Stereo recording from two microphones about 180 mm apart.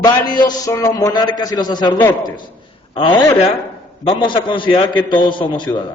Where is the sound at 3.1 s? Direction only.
20° left (ahead or behind).